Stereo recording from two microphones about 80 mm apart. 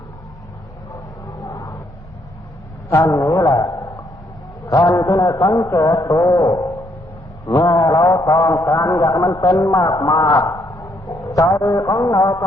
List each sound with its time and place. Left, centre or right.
1.3 s a sound: left
3.1 s a man's voice: left
4.7 s a man's voice: left
7.7 s a man's voice: left
11.2 s a man's voice: left